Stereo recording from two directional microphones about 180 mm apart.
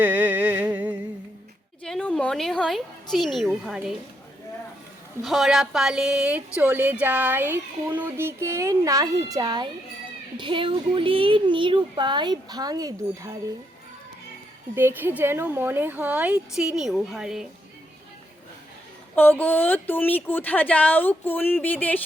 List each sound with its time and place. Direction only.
0.0 s music: 10° right (ahead or behind)
1.8 s speech: 5° left (ahead or behind)
5.2 s a woman's voice: centre (ahead or behind); by 13.3 s 20° right (ahead or behind)
14.8 s speech: 10° right (ahead or behind)
19.1 s speech: 10° left (ahead or behind)